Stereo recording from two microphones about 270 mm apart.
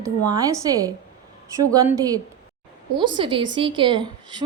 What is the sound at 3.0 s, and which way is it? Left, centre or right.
A woman's voice, centre.